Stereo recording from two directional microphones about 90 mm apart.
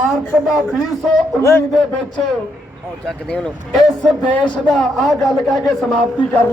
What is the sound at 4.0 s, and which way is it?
A man's voice, 10° left (ahead or behind).